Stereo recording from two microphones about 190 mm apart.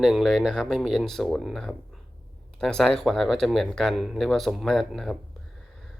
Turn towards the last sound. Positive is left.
turn(degrees=0)  # may be behind; listen again after turning